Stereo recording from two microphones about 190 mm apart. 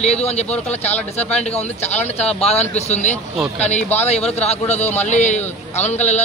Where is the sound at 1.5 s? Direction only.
35° left (ahead or behind).